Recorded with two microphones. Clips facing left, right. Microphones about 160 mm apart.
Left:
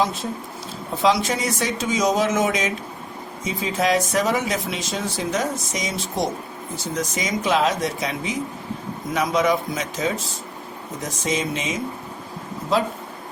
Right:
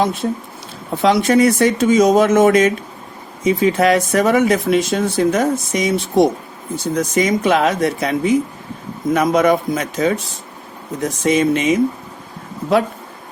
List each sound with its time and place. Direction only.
0.0 s speech: 60° right (ahead or behind)